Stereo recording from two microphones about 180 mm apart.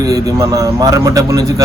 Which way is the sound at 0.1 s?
20° right (ahead or behind).